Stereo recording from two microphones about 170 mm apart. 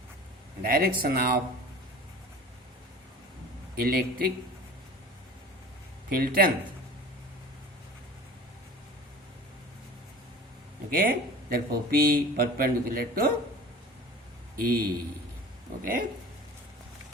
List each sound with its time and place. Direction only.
0.6 s a man's voice: 60° right (ahead or behind)
3.8 s a man's voice: 60° right (ahead or behind)
6.1 s a man's voice: 60° right (ahead or behind)
10.9 s a man's voice: 60° right (ahead or behind)
14.5 s a man's voice: 60° right (ahead or behind)